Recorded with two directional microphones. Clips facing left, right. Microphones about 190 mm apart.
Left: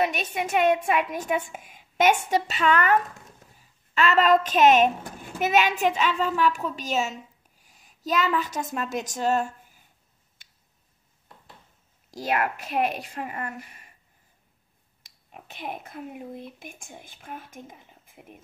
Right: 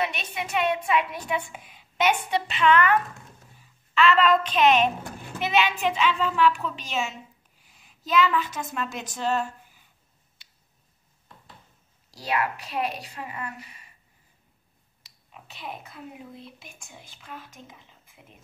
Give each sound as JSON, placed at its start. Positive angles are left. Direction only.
{"t": 0.0, "sound": "a woman's voice", "side_deg": 45}
{"t": 10.4, "sound": "tick", "side_deg": 50}
{"t": 12.1, "sound": "a woman's voice", "side_deg": 50}
{"t": 15.0, "sound": "speech", "side_deg": 50}